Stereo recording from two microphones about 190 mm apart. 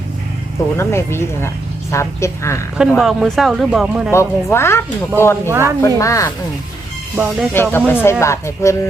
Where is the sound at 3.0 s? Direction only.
Centre (ahead or behind).